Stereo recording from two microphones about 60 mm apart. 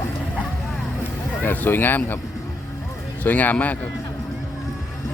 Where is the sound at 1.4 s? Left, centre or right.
Left.